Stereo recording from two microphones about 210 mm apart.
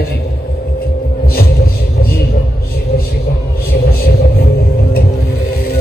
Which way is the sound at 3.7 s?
45° left (ahead or behind).